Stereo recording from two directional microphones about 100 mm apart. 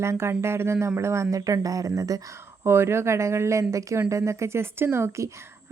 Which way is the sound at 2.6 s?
25° right (ahead or behind).